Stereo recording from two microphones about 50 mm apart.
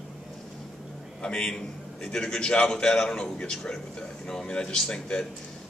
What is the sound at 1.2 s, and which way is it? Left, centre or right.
A man's voice, centre.